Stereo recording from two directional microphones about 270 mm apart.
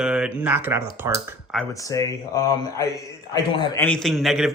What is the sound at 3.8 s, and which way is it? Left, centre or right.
Speech, centre.